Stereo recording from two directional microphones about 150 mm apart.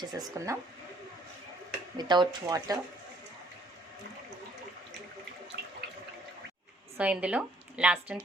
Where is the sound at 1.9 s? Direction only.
30° right (ahead or behind).